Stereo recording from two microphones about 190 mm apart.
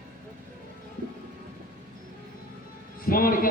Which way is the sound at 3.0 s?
50° left (ahead or behind).